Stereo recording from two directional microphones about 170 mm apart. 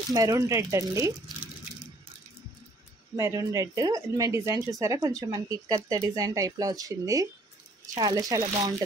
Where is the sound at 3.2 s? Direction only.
15° right (ahead or behind).